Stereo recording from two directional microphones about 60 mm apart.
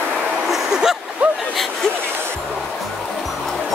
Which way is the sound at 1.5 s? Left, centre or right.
Centre.